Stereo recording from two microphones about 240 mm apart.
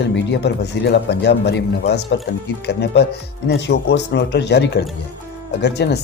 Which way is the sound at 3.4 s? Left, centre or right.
Left.